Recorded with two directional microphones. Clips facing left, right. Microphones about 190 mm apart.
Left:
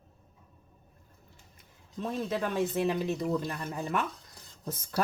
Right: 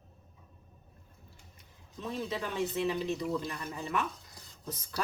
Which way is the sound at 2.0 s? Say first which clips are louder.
Left 4 dB; 50° left (ahead or behind).